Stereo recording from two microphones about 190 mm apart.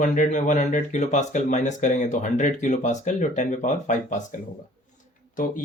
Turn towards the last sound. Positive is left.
turn(degrees=40)  # may be behind; listen again after turning